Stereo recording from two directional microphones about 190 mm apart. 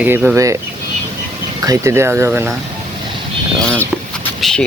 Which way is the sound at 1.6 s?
15° right (ahead or behind).